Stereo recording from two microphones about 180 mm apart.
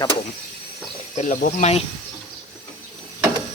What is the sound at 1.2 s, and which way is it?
Speech, 40° left (ahead or behind).